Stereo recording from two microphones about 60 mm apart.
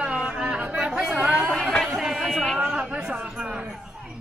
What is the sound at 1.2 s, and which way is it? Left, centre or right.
Chatter, right.